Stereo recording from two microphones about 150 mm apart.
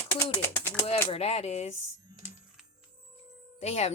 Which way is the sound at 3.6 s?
45° left (ahead or behind).